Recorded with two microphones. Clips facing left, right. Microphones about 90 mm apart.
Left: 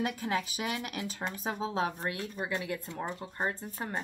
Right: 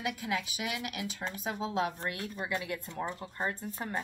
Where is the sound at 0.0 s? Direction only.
40° left (ahead or behind).